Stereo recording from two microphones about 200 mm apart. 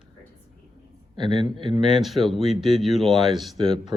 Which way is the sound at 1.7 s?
25° right (ahead or behind).